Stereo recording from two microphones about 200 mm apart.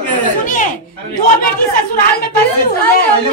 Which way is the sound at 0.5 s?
40° left (ahead or behind).